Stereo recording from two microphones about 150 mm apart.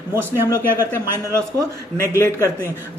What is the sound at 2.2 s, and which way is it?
Speech, 15° left (ahead or behind).